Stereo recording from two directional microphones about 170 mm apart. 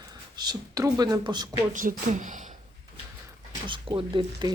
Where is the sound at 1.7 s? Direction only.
50° right (ahead or behind).